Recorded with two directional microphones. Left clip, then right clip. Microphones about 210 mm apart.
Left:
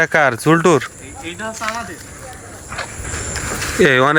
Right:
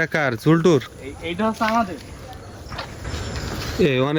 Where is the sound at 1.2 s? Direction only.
55° right (ahead or behind).